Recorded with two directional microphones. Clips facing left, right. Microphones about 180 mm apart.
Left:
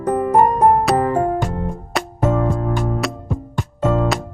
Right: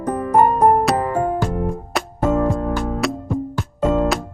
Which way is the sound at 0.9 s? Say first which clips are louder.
Left 2 dB; centre (ahead or behind).